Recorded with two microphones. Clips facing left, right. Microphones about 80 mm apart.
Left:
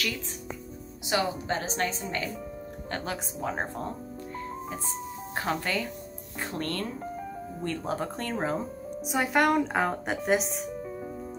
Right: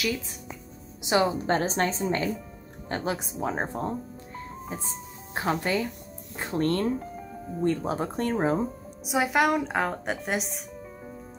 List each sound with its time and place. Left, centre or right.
1.0 s speech: right
1.5 s a woman's voice: right; by 8.6 s centre
9.0 s a woman's voice: centre